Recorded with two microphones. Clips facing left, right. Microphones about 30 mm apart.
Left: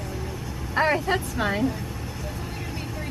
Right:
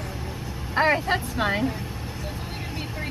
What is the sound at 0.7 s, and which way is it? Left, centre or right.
A woman's voice, centre.